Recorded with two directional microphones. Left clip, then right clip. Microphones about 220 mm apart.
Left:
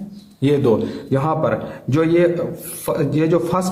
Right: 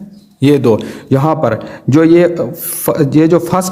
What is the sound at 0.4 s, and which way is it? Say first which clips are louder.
A man's voice: right 6 dB; 40° right (ahead or behind).